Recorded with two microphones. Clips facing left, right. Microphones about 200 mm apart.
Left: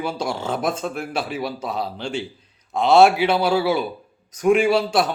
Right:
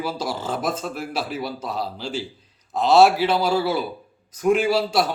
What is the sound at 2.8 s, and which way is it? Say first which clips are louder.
Speech: left 1 dB; 55° left (ahead or behind).